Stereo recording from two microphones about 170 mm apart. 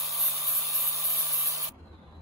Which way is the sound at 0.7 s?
20° right (ahead or behind).